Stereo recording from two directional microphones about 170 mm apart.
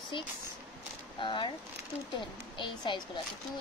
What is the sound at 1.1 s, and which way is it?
Speech, 30° left (ahead or behind).